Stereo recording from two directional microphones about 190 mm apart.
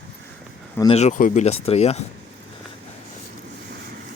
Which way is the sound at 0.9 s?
35° left (ahead or behind).